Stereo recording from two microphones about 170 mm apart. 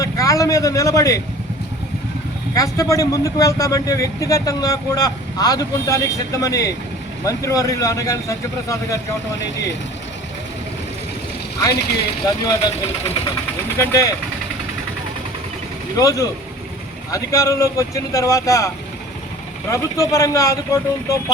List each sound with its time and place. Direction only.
0.0 s a man's voice: 20° left (ahead or behind)
2.6 s speech: 20° left (ahead or behind)
11.7 s speech: 70° left (ahead or behind)
12.2 s speech: 20° left (ahead or behind)
13.7 s speech: 20° left (ahead or behind)
16.0 s speech: 20° left (ahead or behind)
19.7 s speech: 20° left (ahead or behind)